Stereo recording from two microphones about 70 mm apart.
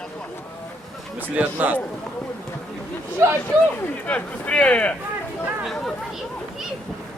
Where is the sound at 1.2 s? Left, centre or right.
Right.